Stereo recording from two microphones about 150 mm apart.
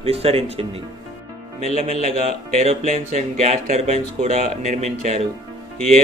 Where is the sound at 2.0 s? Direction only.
45° right (ahead or behind).